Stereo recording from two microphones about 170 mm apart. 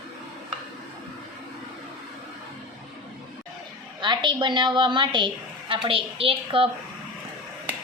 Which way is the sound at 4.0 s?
25° right (ahead or behind).